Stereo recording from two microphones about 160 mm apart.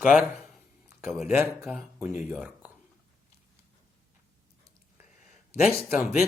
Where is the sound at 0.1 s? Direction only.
10° right (ahead or behind).